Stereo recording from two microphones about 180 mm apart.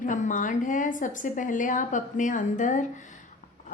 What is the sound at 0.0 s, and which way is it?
A woman's voice, 45° left (ahead or behind).